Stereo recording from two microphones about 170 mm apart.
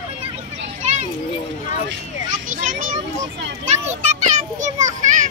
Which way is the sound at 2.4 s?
50° right (ahead or behind).